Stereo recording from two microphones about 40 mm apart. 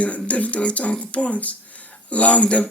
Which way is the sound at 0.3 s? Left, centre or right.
Left.